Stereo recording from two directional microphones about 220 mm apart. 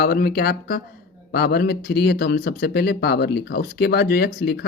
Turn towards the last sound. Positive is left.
turn(degrees=45)  # may be behind; listen again after turning